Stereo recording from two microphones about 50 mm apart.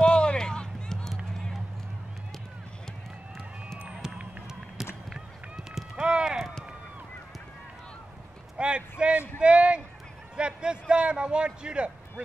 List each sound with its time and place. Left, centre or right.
0.0 s run: centre
3.8 s run: centre
8.5 s a sound: centre
9.4 s a man's voice: right